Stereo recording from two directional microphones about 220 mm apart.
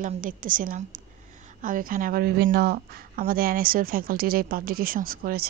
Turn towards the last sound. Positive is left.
turn(degrees=-40)  # may be behind; listen again after turning